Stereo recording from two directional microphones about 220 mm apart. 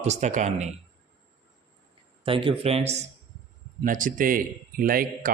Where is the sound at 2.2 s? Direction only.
25° right (ahead or behind).